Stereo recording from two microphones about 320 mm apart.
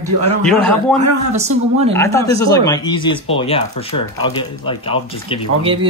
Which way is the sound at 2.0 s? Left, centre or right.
Centre.